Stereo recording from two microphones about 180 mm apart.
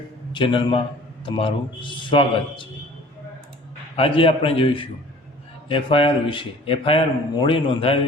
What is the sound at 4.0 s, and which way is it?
A man's voice, 30° left (ahead or behind).